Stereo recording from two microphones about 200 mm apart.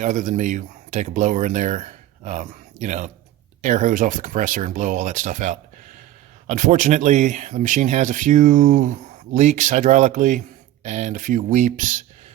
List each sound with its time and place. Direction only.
0.0 s speech: 40° right (ahead or behind)